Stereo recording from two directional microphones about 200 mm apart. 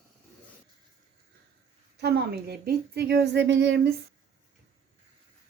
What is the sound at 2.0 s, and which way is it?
A woman's voice, 55° right (ahead or behind).